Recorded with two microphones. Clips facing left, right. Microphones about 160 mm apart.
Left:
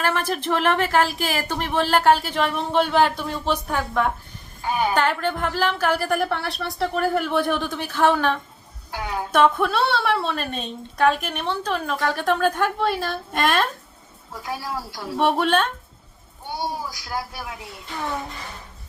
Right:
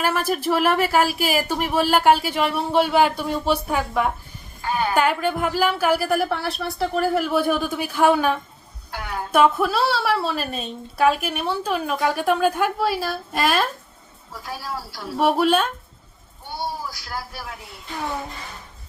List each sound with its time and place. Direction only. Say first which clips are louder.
0.0 s a woman's voice: right 2 dB; 10° right (ahead or behind)
4.6 s speech: left 1 dB; 15° left (ahead or behind)
4.9 s a woman's voice: right 2 dB; 10° right (ahead or behind)
8.9 s a sound: left 2 dB; 15° left (ahead or behind)
9.3 s a woman's voice: right 1 dB; 5° right (ahead or behind)
14.4 s speech: left 2 dB; 15° left (ahead or behind)
15.2 s speech: right 1 dB; 5° right (ahead or behind)
16.6 s speech: even; 15° left (ahead or behind)